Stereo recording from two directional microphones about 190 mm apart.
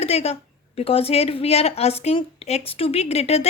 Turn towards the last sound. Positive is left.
turn(degrees=30)  # may be behind; listen again after turning